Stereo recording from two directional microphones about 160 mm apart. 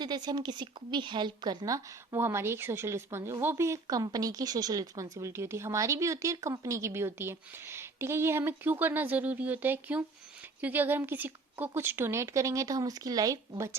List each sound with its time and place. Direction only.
0.0 s a woman's voice: 25° right (ahead or behind)